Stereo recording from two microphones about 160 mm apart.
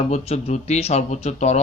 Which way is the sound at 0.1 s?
45° left (ahead or behind).